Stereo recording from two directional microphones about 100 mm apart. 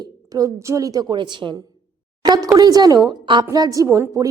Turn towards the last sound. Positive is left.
turn(degrees=-35)  # may be behind; listen again after turning